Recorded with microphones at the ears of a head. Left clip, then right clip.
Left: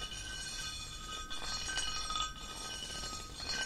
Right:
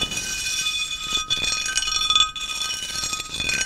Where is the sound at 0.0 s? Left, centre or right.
Right.